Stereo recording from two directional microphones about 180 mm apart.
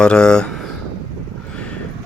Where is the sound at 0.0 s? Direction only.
5° left (ahead or behind).